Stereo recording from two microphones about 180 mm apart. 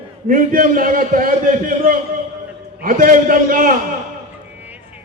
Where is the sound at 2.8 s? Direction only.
50° right (ahead or behind).